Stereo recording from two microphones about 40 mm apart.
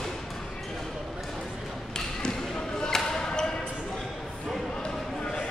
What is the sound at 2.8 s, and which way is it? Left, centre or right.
Basketball bounce, centre.